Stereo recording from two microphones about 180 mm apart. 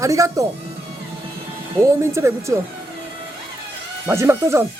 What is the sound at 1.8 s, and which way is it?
Speech, 15° right (ahead or behind).